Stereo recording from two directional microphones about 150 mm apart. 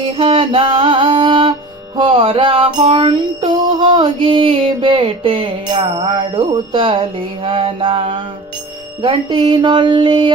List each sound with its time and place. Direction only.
0.2 s music: 40° right (ahead or behind)